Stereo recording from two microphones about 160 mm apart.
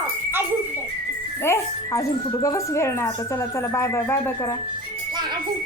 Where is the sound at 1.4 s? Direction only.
20° left (ahead or behind).